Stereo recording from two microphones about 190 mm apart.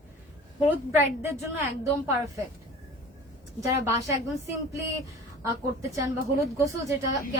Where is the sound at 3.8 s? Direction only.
15° right (ahead or behind).